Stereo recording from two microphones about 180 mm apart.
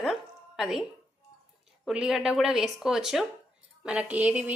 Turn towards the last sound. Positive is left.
turn(degrees=-10)  # may be behind; listen again after turning